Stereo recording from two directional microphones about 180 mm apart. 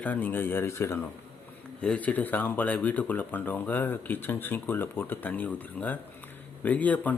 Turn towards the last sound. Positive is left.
turn(degrees=10)  # may be behind; listen again after turning